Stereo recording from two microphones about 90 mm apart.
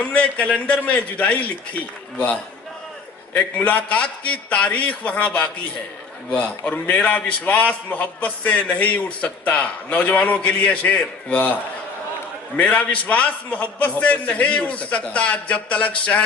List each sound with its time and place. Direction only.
0.0 s a man's voice: 15° left (ahead or behind)
12.5 s a man's voice: 15° left (ahead or behind)